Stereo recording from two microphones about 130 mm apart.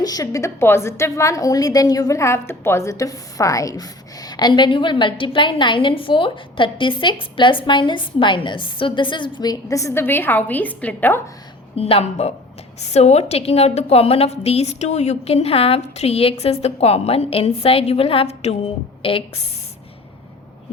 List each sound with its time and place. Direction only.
0.0 s a woman's voice: 30° left (ahead or behind); by 11.2 s 15° left (ahead or behind)
11.8 s a woman's voice: 50° left (ahead or behind)